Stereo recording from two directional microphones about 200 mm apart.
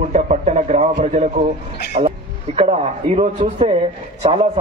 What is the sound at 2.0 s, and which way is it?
A man's voice, 30° right (ahead or behind).